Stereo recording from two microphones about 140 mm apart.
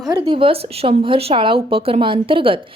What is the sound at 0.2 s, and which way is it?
A woman's voice, 40° right (ahead or behind).